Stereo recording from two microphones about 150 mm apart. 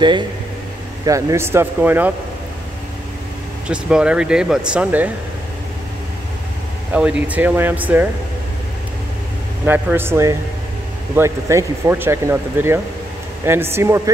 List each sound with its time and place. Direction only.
1.0 s speech: 20° right (ahead or behind)
3.6 s speech: 5° right (ahead or behind)
6.9 s speech: 5° right (ahead or behind)
9.7 s speech: 15° right (ahead or behind)